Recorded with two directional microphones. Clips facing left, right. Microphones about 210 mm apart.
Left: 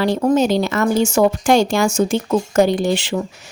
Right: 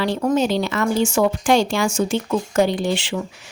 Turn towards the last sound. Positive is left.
turn(degrees=40)  # may be behind; listen again after turning